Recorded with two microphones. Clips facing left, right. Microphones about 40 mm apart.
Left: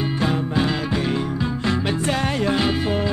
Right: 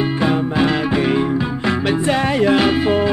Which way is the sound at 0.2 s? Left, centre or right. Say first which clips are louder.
Right 4 dB; right.